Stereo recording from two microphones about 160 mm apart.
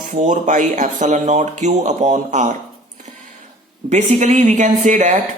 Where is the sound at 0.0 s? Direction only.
55° right (ahead or behind).